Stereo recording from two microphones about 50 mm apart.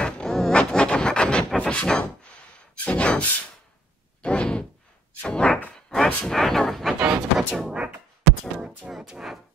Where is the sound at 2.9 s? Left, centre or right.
Left; by 6.6 s centre.